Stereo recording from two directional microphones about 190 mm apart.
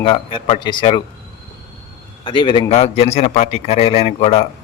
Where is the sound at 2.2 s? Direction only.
25° left (ahead or behind).